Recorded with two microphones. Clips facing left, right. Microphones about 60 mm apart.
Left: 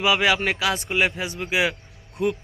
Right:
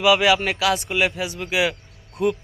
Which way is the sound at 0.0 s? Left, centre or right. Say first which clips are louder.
Right 3 dB; left.